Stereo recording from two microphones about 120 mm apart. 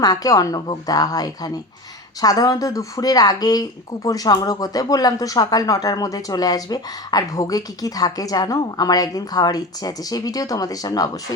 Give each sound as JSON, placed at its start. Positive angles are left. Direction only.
{"t": 0.0, "sound": "speech", "side_deg": 30}